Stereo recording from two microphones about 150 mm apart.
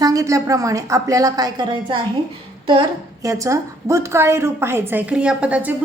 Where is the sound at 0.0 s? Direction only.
20° right (ahead or behind).